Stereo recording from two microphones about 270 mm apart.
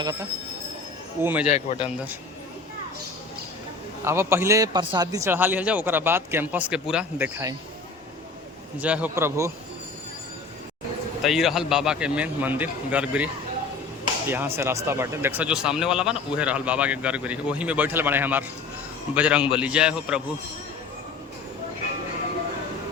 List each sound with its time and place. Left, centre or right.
0.0 s a man's voice: centre
1.5 s a man's voice: left
4.0 s a man's voice: centre
8.8 s a man's voice: centre
11.2 s speech: centre